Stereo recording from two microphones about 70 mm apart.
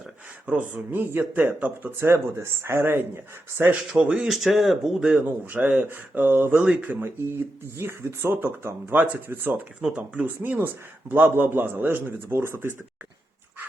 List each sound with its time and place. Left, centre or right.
0.6 s speech: right
3.8 s speech: centre
5.5 s a man's voice: right
6.6 s a man's voice: right
7.0 s a man's voice: right